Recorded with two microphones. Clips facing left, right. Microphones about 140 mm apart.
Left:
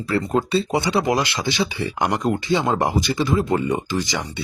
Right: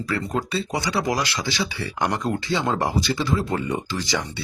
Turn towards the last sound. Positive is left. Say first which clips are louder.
# left 3 dB
turn(degrees=20)  # may be behind; listen again after turning